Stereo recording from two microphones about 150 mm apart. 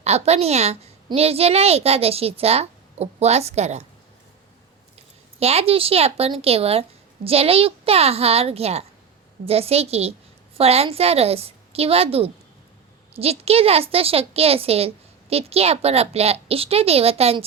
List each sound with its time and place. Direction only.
0.0 s a woman's voice: 45° right (ahead or behind)
4.9 s a woman's voice: 45° right (ahead or behind)